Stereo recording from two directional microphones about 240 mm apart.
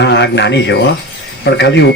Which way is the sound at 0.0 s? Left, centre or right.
Left.